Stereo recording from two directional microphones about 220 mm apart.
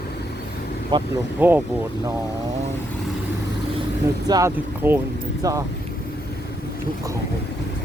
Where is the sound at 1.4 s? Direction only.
10° right (ahead or behind).